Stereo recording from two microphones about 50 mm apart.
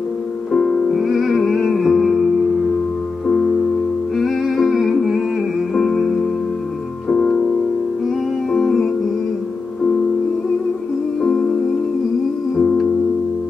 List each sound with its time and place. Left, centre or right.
0.5 s music: centre
3.3 s music: centre
8.6 s music: centre
11.1 s music: centre
12.5 s music: centre